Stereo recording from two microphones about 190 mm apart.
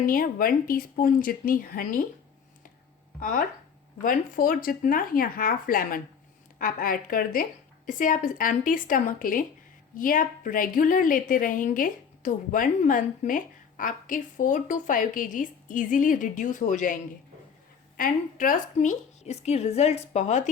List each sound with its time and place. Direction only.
0.0 s a woman's voice: 50° left (ahead or behind)
3.2 s a woman's voice: 45° left (ahead or behind)